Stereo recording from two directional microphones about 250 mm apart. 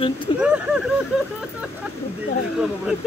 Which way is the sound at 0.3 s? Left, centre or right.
Centre.